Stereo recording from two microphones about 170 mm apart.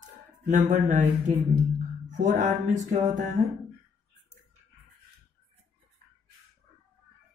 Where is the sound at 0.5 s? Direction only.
45° right (ahead or behind).